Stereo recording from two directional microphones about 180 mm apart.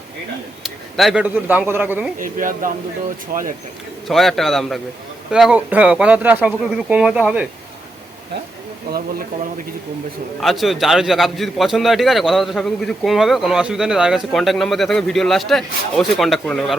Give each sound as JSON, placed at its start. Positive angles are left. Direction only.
{"t": 0.6, "sound": "speech", "side_deg": 0}
{"t": 2.1, "sound": "speech", "side_deg": -50}
{"t": 4.1, "sound": "a man's voice", "side_deg": 0}
{"t": 10.4, "sound": "a man's voice", "side_deg": 0}